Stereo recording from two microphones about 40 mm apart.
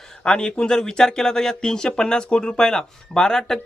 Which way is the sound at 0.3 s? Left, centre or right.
Left.